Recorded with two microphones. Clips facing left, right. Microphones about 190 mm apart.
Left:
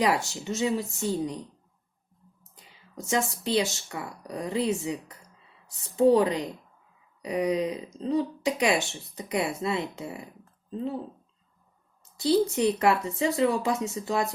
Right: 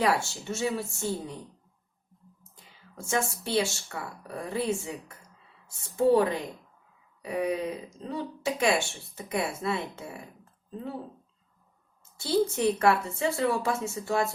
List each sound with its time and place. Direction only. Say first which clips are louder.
0.0 s speech: left 1 dB; 15° left (ahead or behind)
2.9 s speech: left 2 dB; 15° left (ahead or behind)
12.1 s speech: left 3 dB; 15° left (ahead or behind)